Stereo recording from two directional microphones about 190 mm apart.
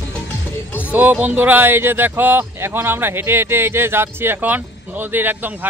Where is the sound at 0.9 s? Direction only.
10° right (ahead or behind).